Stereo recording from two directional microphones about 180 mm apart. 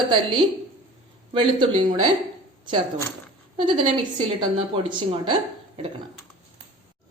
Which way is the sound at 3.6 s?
25° right (ahead or behind).